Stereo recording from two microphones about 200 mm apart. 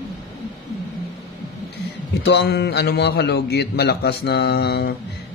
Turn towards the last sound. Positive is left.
turn(degrees=55)  # may be behind; listen again after turning